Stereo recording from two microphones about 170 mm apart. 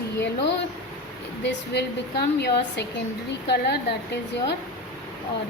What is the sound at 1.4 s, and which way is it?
A woman's voice, 80° left.